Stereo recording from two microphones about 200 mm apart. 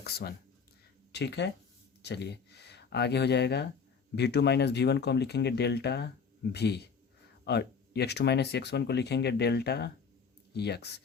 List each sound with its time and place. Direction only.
0.0 s speech: 50° left (ahead or behind)